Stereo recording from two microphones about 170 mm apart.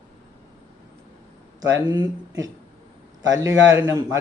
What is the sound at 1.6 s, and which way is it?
Speech, 20° right (ahead or behind).